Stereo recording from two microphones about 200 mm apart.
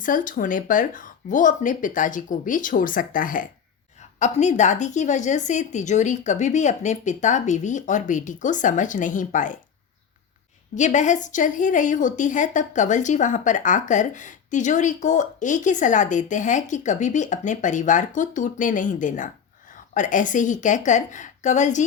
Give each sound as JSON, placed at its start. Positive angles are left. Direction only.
{"t": 0.0, "sound": "a woman's voice", "side_deg": 40}
{"t": 10.8, "sound": "a woman's voice", "side_deg": 35}